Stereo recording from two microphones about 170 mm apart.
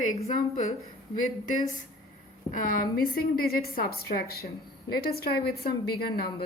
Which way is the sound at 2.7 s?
60° left (ahead or behind).